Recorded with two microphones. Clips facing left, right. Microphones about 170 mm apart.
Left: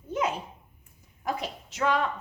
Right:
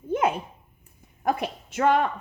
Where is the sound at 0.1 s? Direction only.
55° right (ahead or behind).